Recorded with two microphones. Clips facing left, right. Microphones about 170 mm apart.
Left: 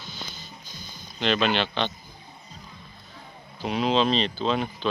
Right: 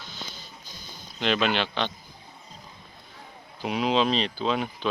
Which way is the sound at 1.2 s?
5° right (ahead or behind).